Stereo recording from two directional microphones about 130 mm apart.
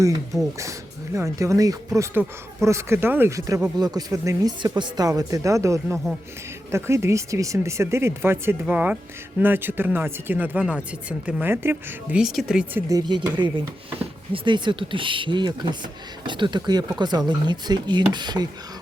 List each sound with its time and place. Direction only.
1.1 s speech: 25° right (ahead or behind)
12.1 s speech: 5° right (ahead or behind)
12.9 s speech: 35° right (ahead or behind)